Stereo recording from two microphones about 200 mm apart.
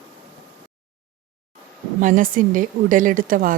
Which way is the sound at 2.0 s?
40° right (ahead or behind).